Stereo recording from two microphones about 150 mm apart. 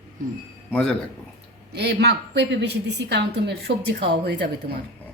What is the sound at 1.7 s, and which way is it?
Speech, 90° right.